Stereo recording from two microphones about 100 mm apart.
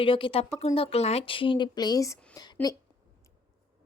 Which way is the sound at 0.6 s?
85° left.